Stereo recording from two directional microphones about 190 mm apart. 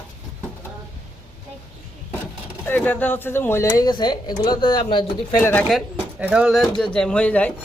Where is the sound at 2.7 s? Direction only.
10° left (ahead or behind); by 5.0 s 25° left (ahead or behind).